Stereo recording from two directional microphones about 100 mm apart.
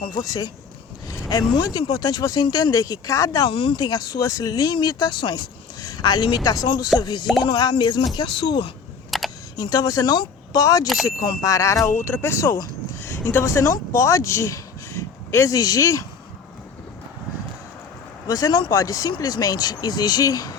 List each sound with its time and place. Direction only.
0.1 s speech: 40° left (ahead or behind)
1.0 s a sound: 40° left (ahead or behind)
1.5 s speech: 45° left (ahead or behind)
3.5 s speech: 55° left (ahead or behind)
3.8 s speech: 40° left (ahead or behind)
9.0 s a sound: centre (ahead or behind)
9.6 s speech: 35° left (ahead or behind)
18.3 s speech: 35° left (ahead or behind)